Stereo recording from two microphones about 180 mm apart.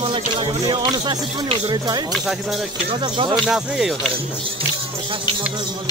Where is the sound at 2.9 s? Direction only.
30° right (ahead or behind).